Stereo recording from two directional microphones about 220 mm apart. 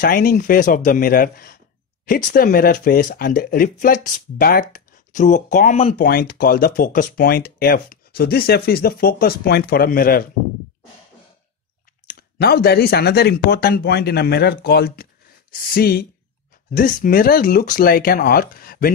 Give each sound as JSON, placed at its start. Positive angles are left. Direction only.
{"t": 0.0, "sound": "speech", "side_deg": 40}
{"t": 5.9, "sound": "speech", "side_deg": 45}
{"t": 12.2, "sound": "speech", "side_deg": 45}